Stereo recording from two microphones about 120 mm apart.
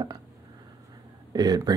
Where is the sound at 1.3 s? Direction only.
35° right (ahead or behind).